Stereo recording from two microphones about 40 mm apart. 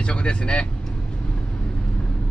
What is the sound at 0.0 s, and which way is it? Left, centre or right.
Speech, left.